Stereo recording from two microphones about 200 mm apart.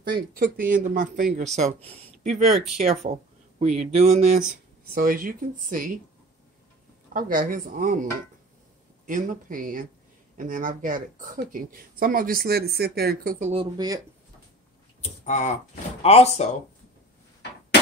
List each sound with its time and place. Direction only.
0.1 s speech: 40° right (ahead or behind)
2.5 s speech: centre (ahead or behind)
3.5 s speech: 35° right (ahead or behind)
4.9 s speech: 45° right (ahead or behind)
7.2 s speech: 45° right (ahead or behind)
13.5 s speech: 25° right (ahead or behind)
15.0 s speech: 35° left (ahead or behind)